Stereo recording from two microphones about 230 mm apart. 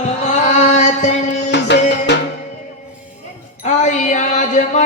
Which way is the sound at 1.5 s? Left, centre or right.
Left.